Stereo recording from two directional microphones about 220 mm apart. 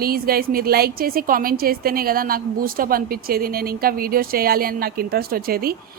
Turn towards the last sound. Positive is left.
turn(degrees=-45)  # may be behind; listen again after turning